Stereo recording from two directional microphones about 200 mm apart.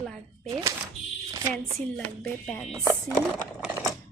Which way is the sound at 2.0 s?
10° left (ahead or behind).